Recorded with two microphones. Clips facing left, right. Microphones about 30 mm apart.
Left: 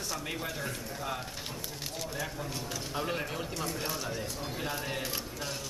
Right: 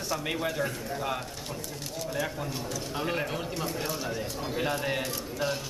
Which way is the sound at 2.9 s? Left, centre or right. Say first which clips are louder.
Right 3 dB; centre.